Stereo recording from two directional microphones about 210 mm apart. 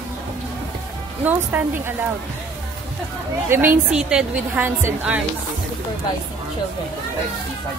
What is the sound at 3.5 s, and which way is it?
A woman's voice, 10° right (ahead or behind).